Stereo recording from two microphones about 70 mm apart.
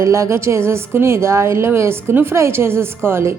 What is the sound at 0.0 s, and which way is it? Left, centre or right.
A woman's voice, right.